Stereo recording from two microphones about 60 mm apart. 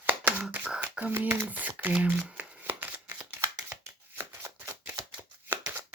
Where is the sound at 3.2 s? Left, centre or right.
Right.